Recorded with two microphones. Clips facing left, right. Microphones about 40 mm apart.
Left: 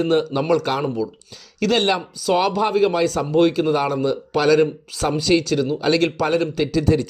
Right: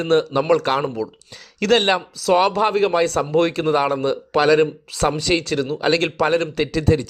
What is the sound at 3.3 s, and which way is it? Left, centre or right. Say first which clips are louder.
Speech: left 2 dB; right.